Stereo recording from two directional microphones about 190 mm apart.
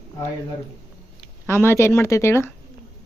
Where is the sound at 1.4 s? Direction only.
15° left (ahead or behind).